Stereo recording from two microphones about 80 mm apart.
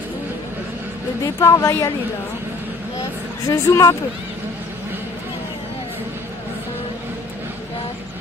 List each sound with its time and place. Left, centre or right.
1.2 s speech: left
3.4 s speech: left